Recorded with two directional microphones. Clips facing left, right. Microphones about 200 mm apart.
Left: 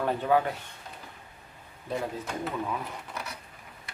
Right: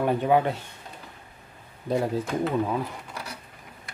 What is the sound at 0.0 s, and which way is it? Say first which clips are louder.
Speech: right 4 dB; 15° right (ahead or behind).